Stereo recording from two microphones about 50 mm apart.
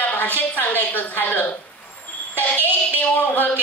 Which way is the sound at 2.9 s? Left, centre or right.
Left.